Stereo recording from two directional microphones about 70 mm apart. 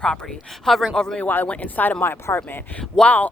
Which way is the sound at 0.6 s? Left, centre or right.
Centre.